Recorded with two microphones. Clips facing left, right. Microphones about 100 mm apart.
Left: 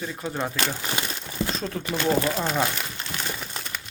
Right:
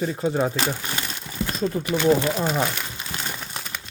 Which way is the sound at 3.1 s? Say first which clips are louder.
Right 1 dB; 30° right (ahead or behind).